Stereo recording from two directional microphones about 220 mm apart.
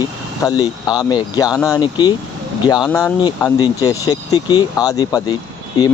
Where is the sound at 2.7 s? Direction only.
Centre (ahead or behind).